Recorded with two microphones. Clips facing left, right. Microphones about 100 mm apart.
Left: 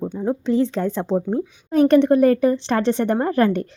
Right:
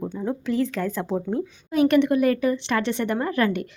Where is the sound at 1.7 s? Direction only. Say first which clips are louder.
Left 4 dB; 35° left (ahead or behind).